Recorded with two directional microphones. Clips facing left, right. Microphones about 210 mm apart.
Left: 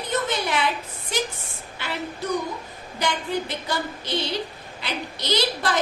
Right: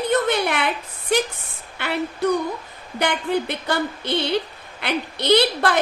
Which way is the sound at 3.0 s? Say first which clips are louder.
Right 4 dB; 60° right (ahead or behind).